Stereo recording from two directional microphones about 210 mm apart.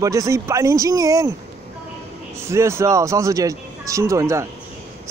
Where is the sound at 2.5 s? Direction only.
15° right (ahead or behind).